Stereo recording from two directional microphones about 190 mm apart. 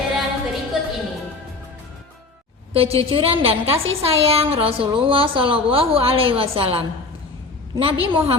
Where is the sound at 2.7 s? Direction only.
30° right (ahead or behind).